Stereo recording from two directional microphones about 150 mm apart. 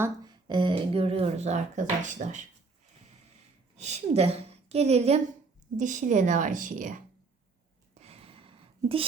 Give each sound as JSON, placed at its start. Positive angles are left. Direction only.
{"t": 0.4, "sound": "speech", "side_deg": -30}
{"t": 3.8, "sound": "speech", "side_deg": -45}
{"t": 5.7, "sound": "a woman's voice", "side_deg": -60}
{"t": 7.9, "sound": "a sound", "side_deg": -45}